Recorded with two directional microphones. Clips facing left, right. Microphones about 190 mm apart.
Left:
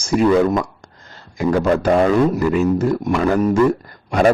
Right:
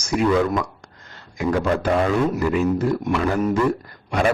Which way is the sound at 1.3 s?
40° left (ahead or behind).